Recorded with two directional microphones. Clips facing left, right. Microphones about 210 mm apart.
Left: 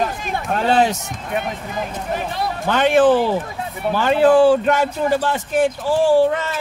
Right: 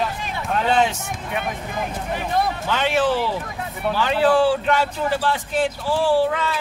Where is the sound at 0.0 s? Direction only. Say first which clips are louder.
Left 3 dB; 45° left (ahead or behind).